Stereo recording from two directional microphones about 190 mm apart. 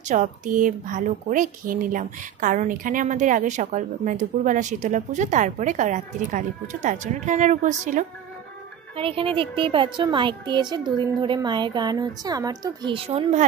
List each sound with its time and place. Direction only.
0.0 s a woman's voice: 40° right (ahead or behind)
8.9 s speech: 30° right (ahead or behind)